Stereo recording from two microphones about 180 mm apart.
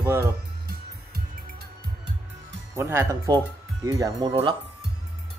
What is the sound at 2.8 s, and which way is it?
Speech, 15° right (ahead or behind).